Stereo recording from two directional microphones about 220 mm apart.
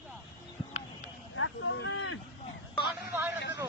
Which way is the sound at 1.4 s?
65° left (ahead or behind).